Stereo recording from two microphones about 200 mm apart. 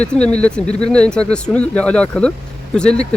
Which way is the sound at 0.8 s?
5° left (ahead or behind).